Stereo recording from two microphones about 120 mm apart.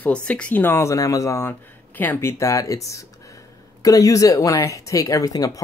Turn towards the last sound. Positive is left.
turn(degrees=30)  # may be behind; listen again after turning